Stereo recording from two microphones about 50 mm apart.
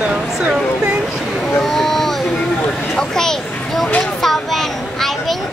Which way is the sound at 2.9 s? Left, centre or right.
Centre.